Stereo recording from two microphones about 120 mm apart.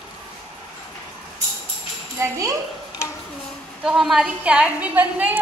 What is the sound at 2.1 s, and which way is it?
Speech, 25° right (ahead or behind).